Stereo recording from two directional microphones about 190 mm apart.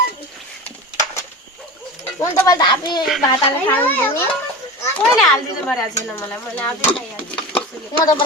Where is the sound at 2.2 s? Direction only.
20° left (ahead or behind).